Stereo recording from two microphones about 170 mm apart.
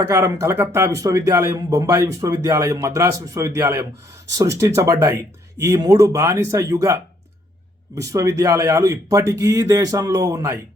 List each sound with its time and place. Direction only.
0.1 s speech: 15° right (ahead or behind)